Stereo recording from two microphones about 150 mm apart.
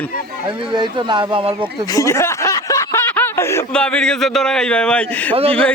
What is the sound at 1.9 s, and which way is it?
Snicker, 20° left (ahead or behind).